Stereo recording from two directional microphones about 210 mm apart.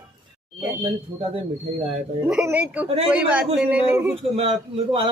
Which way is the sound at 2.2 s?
5° right (ahead or behind).